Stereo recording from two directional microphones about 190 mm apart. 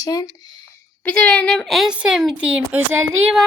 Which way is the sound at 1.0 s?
5° left (ahead or behind).